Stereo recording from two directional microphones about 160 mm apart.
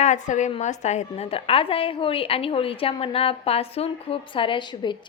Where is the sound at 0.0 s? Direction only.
50° left (ahead or behind).